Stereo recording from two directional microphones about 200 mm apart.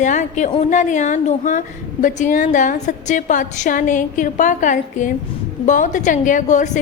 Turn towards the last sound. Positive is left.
turn(degrees=40)  # may be behind; listen again after turning